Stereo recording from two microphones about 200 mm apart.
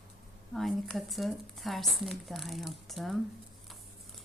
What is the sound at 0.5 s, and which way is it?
Speech, centre (ahead or behind).